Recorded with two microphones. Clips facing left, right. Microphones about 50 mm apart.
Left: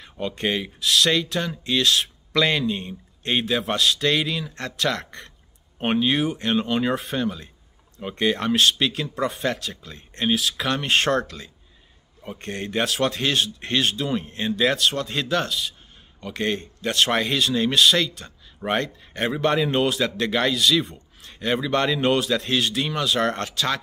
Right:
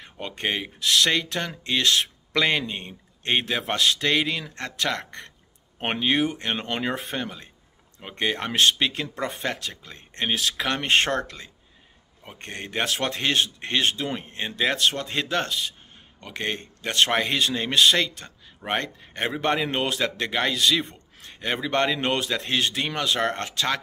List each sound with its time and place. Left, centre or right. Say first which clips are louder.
0.0 s speech: left 3 dB; right
0.7 s speech: left 1 dB; right
5.8 s speech: left 2 dB; right
6.8 s speech: left 4 dB; right
14.8 s speech: left 1 dB; right
16.3 s speech: left 4 dB; right
20.5 s speech: left 2 dB; right
23.2 s speech: left 2 dB; right
23.5 s speech: left 1 dB; right